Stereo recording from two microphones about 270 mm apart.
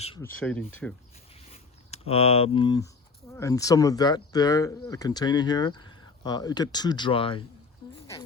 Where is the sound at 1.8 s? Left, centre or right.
Left.